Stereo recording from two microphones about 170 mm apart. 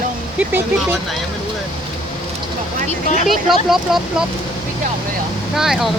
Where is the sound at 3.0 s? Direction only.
45° left (ahead or behind).